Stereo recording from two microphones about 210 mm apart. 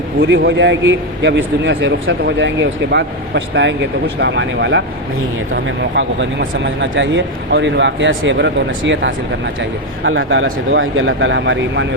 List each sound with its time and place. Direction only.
0.2 s speech: 60° right (ahead or behind)
6.7 s speech: 60° right (ahead or behind)